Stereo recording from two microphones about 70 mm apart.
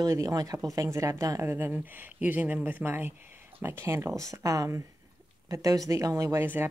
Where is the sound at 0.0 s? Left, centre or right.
Right.